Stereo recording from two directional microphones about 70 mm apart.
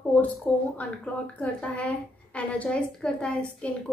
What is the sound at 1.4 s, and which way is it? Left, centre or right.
A woman's voice, centre.